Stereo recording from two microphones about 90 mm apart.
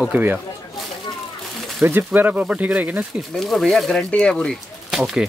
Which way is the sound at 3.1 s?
5° left (ahead or behind).